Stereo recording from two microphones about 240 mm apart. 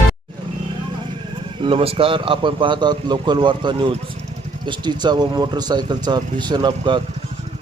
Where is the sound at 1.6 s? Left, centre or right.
Right.